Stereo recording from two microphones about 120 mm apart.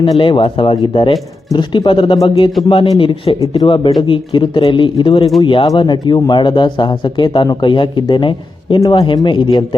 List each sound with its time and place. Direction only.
0.0 s speech: 45° left (ahead or behind)